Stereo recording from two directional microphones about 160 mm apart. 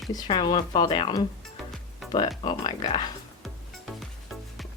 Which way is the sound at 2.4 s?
25° left (ahead or behind).